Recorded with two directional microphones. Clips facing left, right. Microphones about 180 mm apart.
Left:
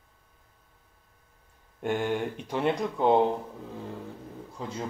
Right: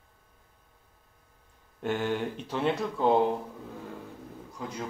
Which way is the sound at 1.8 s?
10° left (ahead or behind).